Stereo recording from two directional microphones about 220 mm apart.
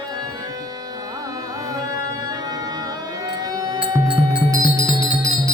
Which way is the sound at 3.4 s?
15° right (ahead or behind).